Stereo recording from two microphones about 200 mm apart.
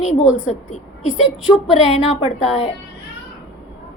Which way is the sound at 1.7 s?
30° left (ahead or behind).